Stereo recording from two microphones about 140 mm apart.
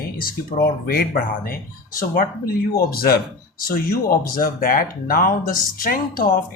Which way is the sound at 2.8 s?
90° left.